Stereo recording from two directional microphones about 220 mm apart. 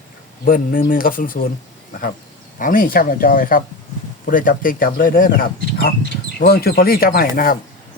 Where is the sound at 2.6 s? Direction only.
40° left (ahead or behind).